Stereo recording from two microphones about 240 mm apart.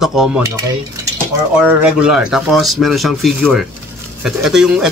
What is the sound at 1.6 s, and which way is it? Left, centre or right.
Speech, centre.